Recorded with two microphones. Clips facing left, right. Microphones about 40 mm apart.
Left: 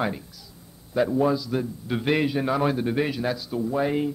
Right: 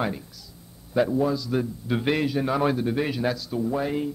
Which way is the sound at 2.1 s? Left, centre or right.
Centre.